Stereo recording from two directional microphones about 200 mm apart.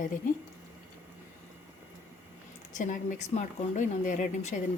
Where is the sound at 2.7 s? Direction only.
40° left (ahead or behind).